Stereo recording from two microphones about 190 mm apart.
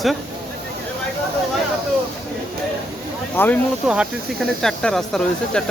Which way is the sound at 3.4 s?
10° left (ahead or behind).